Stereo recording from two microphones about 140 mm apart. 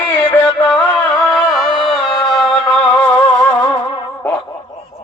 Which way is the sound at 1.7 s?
40° left (ahead or behind).